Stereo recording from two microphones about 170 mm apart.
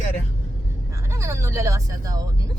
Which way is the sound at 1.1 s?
15° right (ahead or behind).